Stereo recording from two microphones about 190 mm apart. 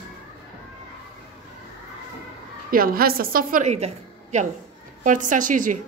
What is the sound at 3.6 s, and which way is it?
A woman's voice, 35° right (ahead or behind).